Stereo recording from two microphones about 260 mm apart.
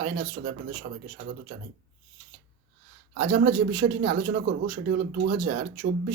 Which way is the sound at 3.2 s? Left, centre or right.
Right.